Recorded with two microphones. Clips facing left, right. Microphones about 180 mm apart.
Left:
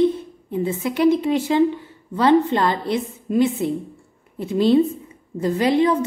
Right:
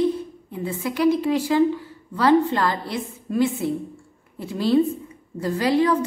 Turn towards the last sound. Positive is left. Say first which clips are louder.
# left 2 dB
turn(degrees=20)  # may be behind; listen again after turning